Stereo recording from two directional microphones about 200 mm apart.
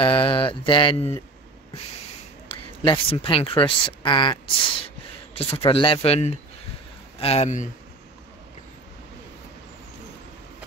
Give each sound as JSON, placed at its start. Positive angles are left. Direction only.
{"t": 0.0, "sound": "speech", "side_deg": 25}
{"t": 2.8, "sound": "speech", "side_deg": 25}